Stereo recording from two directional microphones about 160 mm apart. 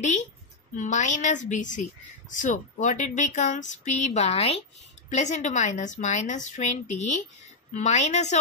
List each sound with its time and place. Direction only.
0.0 s speech: 50° left (ahead or behind)